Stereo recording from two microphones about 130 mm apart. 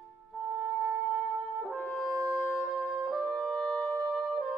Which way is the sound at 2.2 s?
5° left (ahead or behind).